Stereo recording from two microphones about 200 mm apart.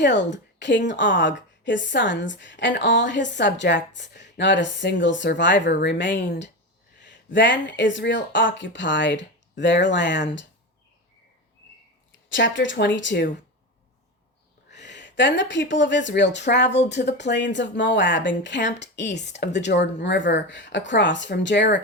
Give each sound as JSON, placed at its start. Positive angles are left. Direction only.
{"t": 0.0, "sound": "a woman's voice", "side_deg": 60}
{"t": 12.3, "sound": "a woman's voice", "side_deg": 65}
{"t": 14.7, "sound": "a woman's voice", "side_deg": 60}